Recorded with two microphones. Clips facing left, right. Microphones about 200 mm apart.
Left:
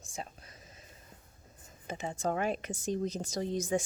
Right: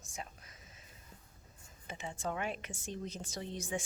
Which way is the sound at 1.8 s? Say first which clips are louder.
Left 6 dB; 40° left (ahead or behind).